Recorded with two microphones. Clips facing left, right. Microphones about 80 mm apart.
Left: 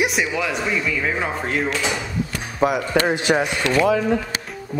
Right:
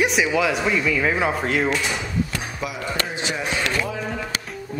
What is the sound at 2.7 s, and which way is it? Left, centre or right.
Speech, left.